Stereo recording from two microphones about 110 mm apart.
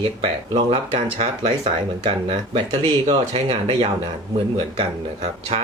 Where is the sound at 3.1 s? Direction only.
65° right (ahead or behind).